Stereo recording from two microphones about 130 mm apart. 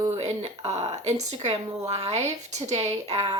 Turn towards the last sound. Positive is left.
turn(degrees=-55)  # may be behind; listen again after turning